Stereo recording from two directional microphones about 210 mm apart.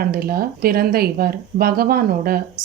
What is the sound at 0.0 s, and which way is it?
A woman's voice, 45° right (ahead or behind).